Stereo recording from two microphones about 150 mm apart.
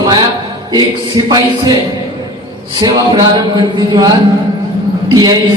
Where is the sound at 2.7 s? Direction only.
30° right (ahead or behind).